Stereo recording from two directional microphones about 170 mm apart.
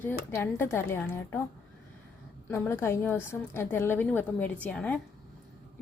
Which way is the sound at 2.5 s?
15° left (ahead or behind).